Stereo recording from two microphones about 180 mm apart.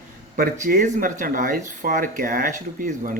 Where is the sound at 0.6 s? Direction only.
50° right (ahead or behind).